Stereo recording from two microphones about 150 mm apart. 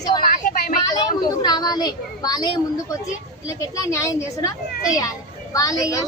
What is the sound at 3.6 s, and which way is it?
A child's voice, 20° left (ahead or behind).